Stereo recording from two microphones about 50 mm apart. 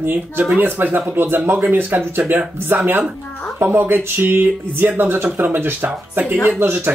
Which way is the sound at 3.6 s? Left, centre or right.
Right.